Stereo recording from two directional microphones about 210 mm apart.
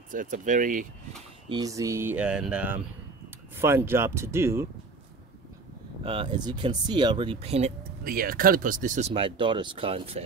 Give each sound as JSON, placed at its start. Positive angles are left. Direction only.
{"t": 0.1, "sound": "speech", "side_deg": -40}
{"t": 1.5, "sound": "speech", "side_deg": -15}
{"t": 6.0, "sound": "speech", "side_deg": -25}
{"t": 8.0, "sound": "speech", "side_deg": -45}